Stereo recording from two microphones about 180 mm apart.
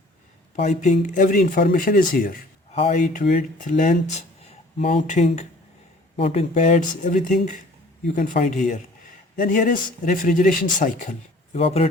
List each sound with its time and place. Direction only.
0.5 s speech: 40° left (ahead or behind)
2.7 s speech: 40° left (ahead or behind)
11.6 s speech: 35° left (ahead or behind)